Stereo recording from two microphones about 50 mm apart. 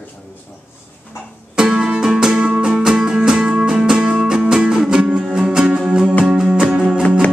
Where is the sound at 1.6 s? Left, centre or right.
Centre.